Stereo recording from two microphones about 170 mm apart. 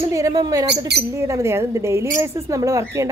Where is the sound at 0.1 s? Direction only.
20° right (ahead or behind).